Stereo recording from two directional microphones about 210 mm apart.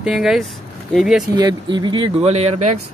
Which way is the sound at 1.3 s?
20° right (ahead or behind).